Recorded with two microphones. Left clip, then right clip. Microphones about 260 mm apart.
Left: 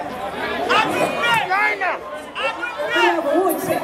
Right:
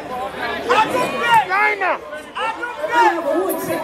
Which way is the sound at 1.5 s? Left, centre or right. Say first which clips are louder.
Right 2 dB; centre.